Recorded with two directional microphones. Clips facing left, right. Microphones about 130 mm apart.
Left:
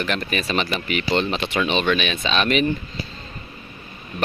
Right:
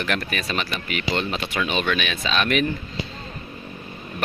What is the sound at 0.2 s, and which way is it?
Speech, 5° left (ahead or behind).